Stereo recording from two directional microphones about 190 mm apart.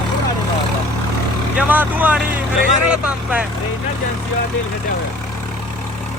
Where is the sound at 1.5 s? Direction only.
10° right (ahead or behind).